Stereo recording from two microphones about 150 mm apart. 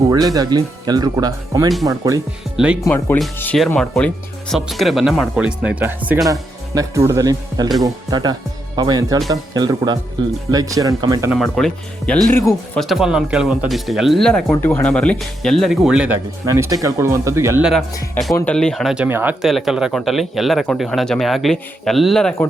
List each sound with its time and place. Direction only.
0.1 s speech: 25° right (ahead or behind)
2.8 s speech: 15° left (ahead or behind); by 11.3 s 25° right (ahead or behind)
11.3 s speech: centre (ahead or behind)
14.5 s speech: 15° left (ahead or behind); by 16.1 s 5° right (ahead or behind)
16.5 s speech: 20° right (ahead or behind)
17.6 s speech: 5° right (ahead or behind)
18.3 s speech: 5° left (ahead or behind)
19.0 s speech: 15° right (ahead or behind); by 22.4 s 5° left (ahead or behind)